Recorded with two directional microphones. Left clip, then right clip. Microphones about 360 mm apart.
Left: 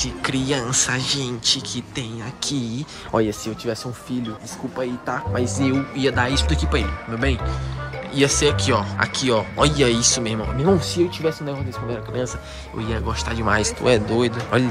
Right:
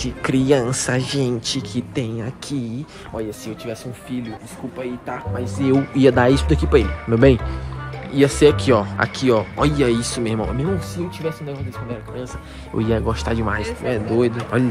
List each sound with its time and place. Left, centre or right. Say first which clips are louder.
0.0 s speech: right 3 dB; centre
3.2 s speech: left 6 dB; centre
5.7 s speech: right 6 dB; centre
12.7 s speech: right 5 dB; centre